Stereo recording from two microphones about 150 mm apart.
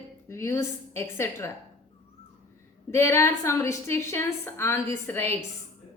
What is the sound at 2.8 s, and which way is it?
A woman's voice, 15° left (ahead or behind).